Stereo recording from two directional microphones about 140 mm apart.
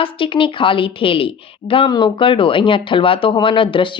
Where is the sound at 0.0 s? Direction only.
40° left (ahead or behind).